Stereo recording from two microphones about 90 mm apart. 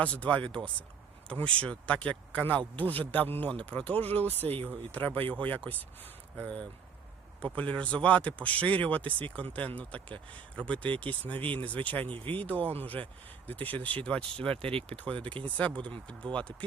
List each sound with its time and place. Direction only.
0.0 s speech: 15° left (ahead or behind)
14.5 s speech: 90° right
14.8 s speech: 15° left (ahead or behind)